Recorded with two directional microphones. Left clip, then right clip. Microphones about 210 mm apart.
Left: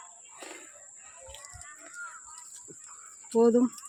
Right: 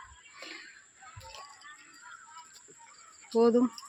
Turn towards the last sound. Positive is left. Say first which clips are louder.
# left 2 dB
turn(degrees=20)  # may be behind; listen again after turning